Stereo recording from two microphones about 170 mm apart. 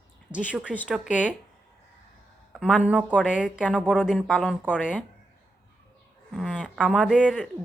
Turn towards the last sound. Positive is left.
turn(degrees=-5)  # may be behind; listen again after turning